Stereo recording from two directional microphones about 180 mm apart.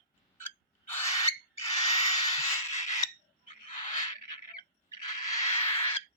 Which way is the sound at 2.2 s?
20° left (ahead or behind).